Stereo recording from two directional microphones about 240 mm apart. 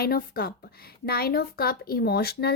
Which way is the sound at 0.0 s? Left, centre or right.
Left.